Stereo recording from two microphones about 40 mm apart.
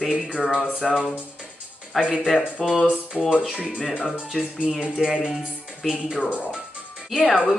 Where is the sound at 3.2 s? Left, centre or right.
Right.